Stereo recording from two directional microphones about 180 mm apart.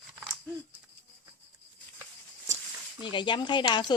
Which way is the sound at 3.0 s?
25° left (ahead or behind).